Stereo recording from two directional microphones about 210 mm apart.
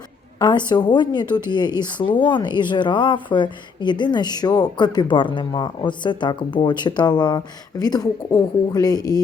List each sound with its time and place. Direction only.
0.3 s a woman's voice: 20° left (ahead or behind)